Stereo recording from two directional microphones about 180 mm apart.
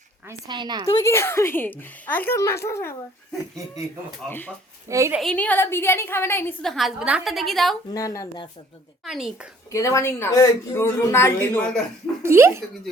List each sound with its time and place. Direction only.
0.3 s a woman's voice: 25° right (ahead or behind)
0.9 s speech: 15° left (ahead or behind)
4.3 s speech: 10° left (ahead or behind)
4.9 s speech: 15° right (ahead or behind)
5.2 s speech: 5° left (ahead or behind)
6.6 s a woman's voice: centre (ahead or behind)
7.9 s speech: 20° left (ahead or behind)
9.0 s a woman's voice: centre (ahead or behind)
9.7 s speech: 15° left (ahead or behind)
12.2 s speech: 15° right (ahead or behind)